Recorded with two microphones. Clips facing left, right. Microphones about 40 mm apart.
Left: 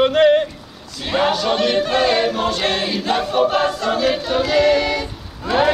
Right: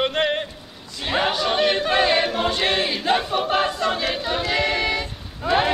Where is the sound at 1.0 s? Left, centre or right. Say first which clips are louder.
Left 3 dB; centre.